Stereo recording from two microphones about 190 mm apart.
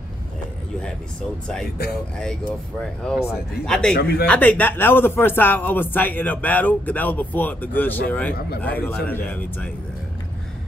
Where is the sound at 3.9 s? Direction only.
55° left (ahead or behind).